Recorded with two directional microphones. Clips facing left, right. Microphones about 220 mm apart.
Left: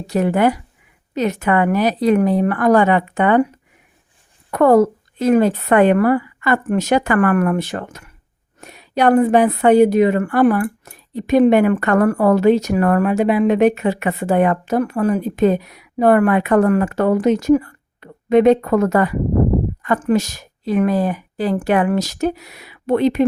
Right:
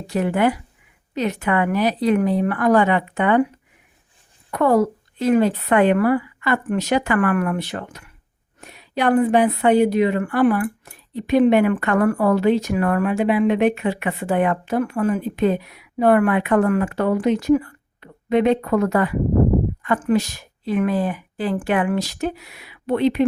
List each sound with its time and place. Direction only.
0.1 s a woman's voice: 40° left (ahead or behind)
4.5 s a woman's voice: 45° left (ahead or behind)